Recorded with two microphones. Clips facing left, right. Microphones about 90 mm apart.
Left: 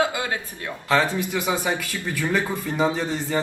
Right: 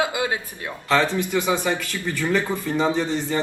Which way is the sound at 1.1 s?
5° left (ahead or behind).